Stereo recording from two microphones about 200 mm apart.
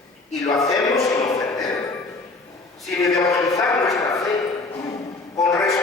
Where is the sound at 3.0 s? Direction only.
15° left (ahead or behind).